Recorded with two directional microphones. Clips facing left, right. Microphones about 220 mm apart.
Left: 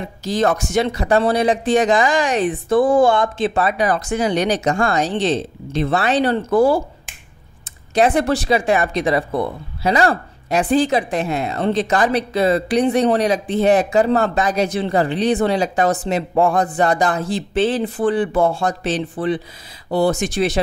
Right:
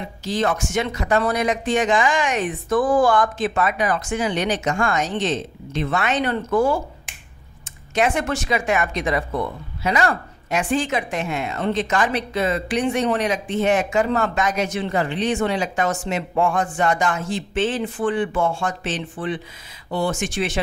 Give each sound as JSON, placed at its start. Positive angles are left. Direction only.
{"t": 0.2, "sound": "speech", "side_deg": 40}
{"t": 7.9, "sound": "speech", "side_deg": 35}